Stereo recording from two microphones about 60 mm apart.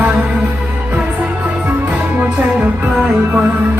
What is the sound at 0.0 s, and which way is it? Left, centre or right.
Music, right.